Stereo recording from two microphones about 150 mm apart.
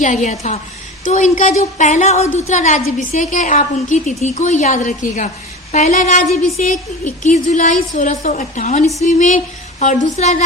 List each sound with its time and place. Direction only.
0.0 s a woman's voice: 55° left (ahead or behind)